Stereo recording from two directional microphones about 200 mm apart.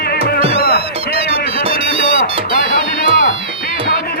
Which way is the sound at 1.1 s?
30° right (ahead or behind).